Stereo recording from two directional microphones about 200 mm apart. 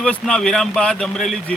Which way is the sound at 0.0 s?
5° left (ahead or behind).